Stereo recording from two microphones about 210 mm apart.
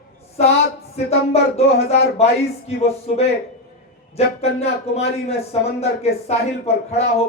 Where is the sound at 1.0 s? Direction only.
30° left (ahead or behind).